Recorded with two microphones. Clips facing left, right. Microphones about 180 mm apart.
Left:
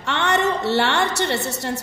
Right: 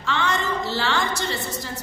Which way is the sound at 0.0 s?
70° left (ahead or behind).